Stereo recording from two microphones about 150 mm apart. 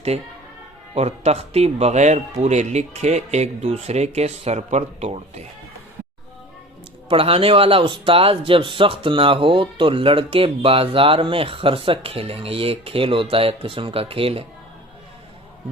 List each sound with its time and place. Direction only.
0.9 s speech: 45° right (ahead or behind)
7.1 s speech: 40° right (ahead or behind)